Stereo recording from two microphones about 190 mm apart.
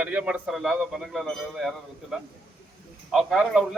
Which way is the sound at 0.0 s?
5° right (ahead or behind).